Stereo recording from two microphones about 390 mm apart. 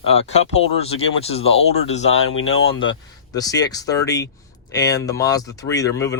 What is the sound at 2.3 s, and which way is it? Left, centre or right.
Speech, left.